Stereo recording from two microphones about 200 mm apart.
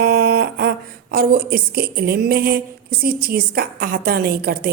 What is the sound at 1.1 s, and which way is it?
A woman's voice, 50° right (ahead or behind).